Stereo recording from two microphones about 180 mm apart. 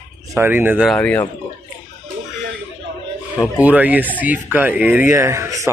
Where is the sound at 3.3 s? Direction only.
5° right (ahead or behind).